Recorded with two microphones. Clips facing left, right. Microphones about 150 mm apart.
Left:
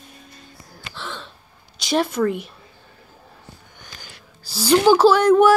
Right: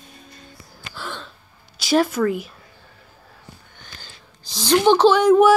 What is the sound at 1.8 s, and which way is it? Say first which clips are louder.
Speech: right 2 dB; centre (ahead or behind).